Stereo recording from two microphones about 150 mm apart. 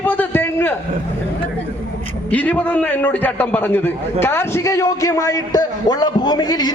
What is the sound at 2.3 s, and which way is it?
A man's voice, 10° left (ahead or behind).